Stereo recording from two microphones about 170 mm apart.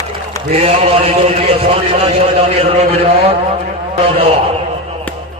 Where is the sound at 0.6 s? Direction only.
35° right (ahead or behind).